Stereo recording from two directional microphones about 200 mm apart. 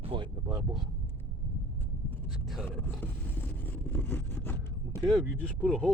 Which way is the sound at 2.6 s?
10° left (ahead or behind).